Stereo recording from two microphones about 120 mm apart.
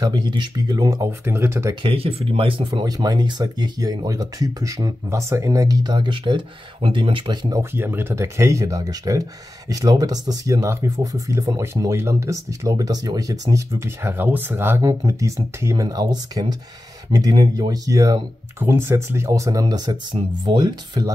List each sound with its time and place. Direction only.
0.0 s speech: 35° right (ahead or behind)
1.8 s speech: 50° right (ahead or behind)
2.7 s speech: 35° right (ahead or behind)
7.5 s speech: 20° right (ahead or behind)
18.6 s speech: 20° right (ahead or behind); by 21.1 s 35° right (ahead or behind)